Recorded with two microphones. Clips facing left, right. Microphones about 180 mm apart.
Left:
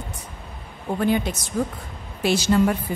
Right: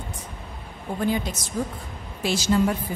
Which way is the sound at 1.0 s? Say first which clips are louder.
Left 3 dB; 65° left (ahead or behind).